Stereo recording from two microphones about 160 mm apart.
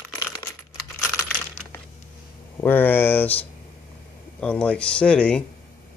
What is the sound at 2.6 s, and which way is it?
Speech, 10° left (ahead or behind).